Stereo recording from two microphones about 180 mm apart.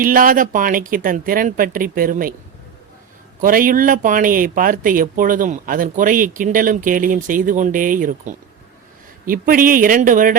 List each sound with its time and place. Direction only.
0.0 s speech: 50° right (ahead or behind)
3.4 s speech: 50° right (ahead or behind)